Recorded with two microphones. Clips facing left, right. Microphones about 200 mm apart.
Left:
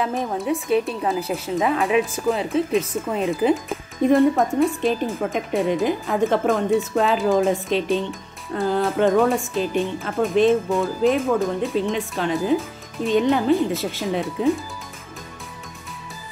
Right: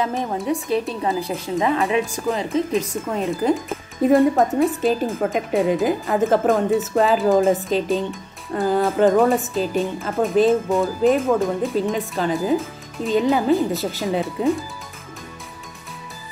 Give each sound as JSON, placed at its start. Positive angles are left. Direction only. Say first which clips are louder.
{"t": 0.0, "sound": "a woman's voice", "louder": "right 1 dB", "side_deg": 0}